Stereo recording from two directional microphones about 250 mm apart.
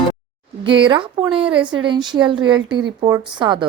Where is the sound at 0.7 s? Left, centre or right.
Centre.